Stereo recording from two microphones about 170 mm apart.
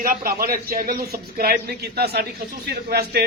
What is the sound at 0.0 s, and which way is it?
A man's voice, 55° right (ahead or behind).